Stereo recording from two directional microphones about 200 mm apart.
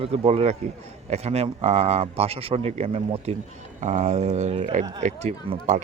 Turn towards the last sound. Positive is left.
turn(degrees=-35)  # may be behind; listen again after turning